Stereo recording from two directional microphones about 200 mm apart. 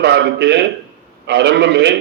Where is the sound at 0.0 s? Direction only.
60° right (ahead or behind).